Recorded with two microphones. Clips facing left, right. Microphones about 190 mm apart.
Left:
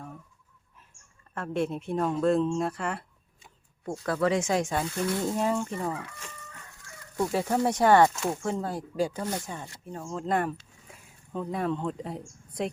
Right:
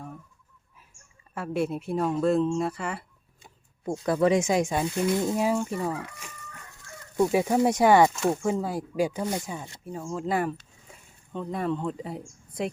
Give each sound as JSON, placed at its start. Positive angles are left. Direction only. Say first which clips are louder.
{"t": 1.3, "sound": "speech", "louder": "right 1 dB", "side_deg": -5}
{"t": 3.8, "sound": "speech", "louder": "right 4 dB", "side_deg": -15}